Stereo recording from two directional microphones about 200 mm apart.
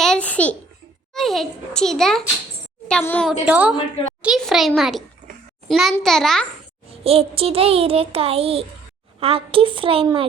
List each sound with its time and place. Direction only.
0.0 s a sound: 5° left (ahead or behind)
1.1 s a child's voice: centre (ahead or behind)
3.4 s a woman's voice: 10° right (ahead or behind)
7.0 s a child's voice: 30° right (ahead or behind)